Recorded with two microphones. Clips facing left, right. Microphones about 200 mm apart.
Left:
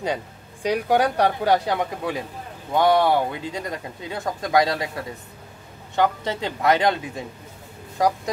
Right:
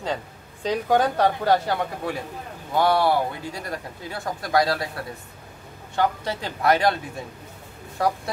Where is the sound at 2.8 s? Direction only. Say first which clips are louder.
Left 2 dB; 20° left (ahead or behind).